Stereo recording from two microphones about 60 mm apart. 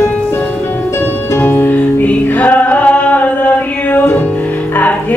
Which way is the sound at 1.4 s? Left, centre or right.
Left.